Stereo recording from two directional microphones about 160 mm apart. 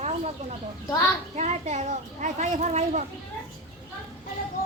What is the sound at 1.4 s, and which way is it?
Speech, 45° right (ahead or behind).